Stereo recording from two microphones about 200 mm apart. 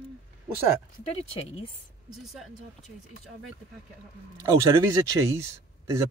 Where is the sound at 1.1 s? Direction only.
30° left (ahead or behind).